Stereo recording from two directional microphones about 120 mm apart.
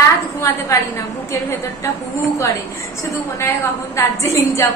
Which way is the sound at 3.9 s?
25° left (ahead or behind).